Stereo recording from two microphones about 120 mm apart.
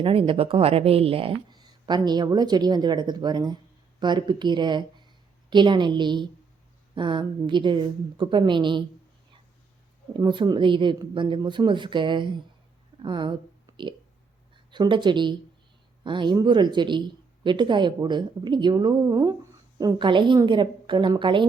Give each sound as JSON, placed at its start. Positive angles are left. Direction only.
{"t": 0.0, "sound": "speech", "side_deg": -50}
{"t": 10.2, "sound": "speech", "side_deg": -40}